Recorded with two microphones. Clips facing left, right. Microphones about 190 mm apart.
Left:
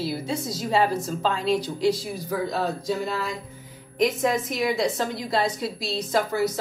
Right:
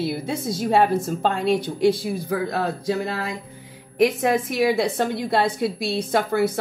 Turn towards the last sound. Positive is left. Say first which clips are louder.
# right 3 dB
turn(degrees=-60)  # may be behind; listen again after turning